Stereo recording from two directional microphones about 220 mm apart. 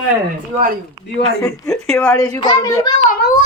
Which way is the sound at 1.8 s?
5° left (ahead or behind).